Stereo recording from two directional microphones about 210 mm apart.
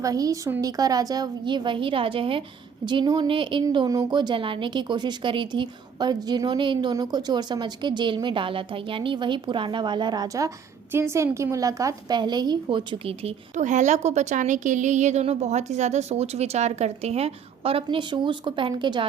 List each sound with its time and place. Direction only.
0.0 s a woman's voice: 15° right (ahead or behind)